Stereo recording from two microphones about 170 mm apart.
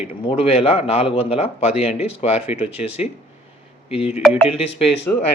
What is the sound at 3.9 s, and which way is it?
Speech, 35° left (ahead or behind).